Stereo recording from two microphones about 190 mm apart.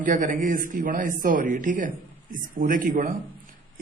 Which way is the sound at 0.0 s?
45° right (ahead or behind).